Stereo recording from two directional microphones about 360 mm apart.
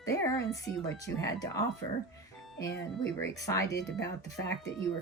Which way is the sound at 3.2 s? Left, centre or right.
Centre.